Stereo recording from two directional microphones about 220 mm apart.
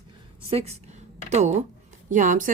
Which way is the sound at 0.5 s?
30° right (ahead or behind).